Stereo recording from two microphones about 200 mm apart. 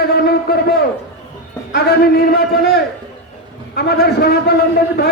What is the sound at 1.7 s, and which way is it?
A man's voice, 50° left (ahead or behind).